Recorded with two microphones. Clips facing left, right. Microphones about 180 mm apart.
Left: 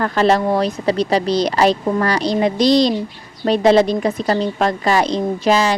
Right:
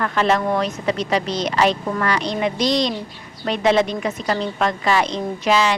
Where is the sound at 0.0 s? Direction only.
35° left (ahead or behind).